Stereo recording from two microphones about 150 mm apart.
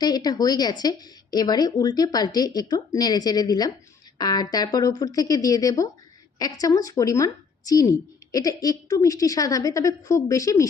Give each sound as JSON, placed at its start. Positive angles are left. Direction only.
{"t": 0.0, "sound": "a woman's voice", "side_deg": 25}